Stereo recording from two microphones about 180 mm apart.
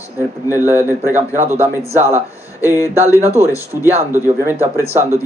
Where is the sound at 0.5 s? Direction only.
10° right (ahead or behind).